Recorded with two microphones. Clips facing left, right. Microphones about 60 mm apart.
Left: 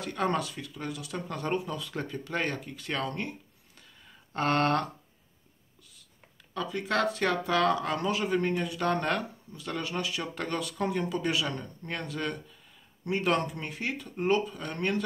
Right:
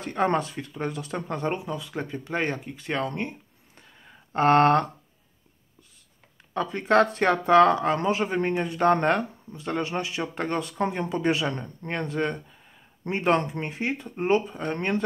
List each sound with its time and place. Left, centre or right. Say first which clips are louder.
0.0 s speech: right 5 dB; right
4.0 s a sound: right 8 dB; right
6.5 s speech: right 8 dB; right